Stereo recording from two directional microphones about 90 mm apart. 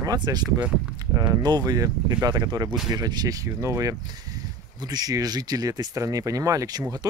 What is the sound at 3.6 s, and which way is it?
Speech, 35° right (ahead or behind).